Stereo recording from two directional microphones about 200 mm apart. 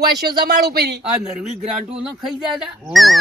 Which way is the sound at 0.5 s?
50° right (ahead or behind).